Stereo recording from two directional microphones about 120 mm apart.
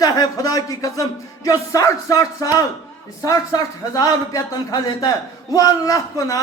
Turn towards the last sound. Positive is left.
turn(degrees=30)  # may be behind; listen again after turning